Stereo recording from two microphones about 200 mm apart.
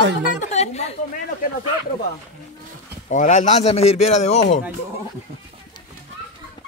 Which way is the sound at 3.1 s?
40° left (ahead or behind).